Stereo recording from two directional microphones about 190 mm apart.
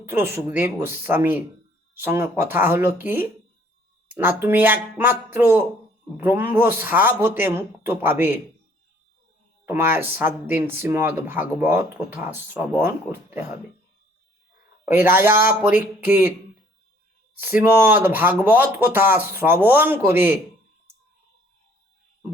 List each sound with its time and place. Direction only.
0.0 s speech: 10° right (ahead or behind)
9.6 s speech: 10° right (ahead or behind)
14.8 s speech: 10° right (ahead or behind)
17.4 s speech: 10° right (ahead or behind)